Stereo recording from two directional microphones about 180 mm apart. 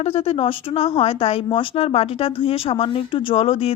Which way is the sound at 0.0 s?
35° left (ahead or behind).